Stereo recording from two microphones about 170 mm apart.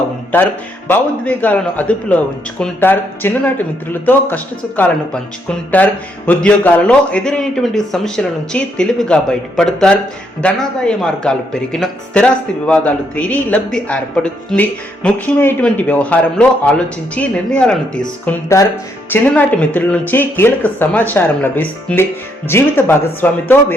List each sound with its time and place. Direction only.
0.3 s speech: 10° left (ahead or behind)
5.7 s a man's voice: 10° left (ahead or behind)
18.3 s speech: 20° left (ahead or behind)